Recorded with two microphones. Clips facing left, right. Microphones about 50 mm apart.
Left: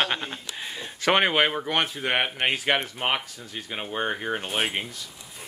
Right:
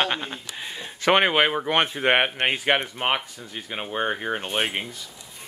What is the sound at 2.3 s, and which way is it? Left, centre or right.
Speech, centre.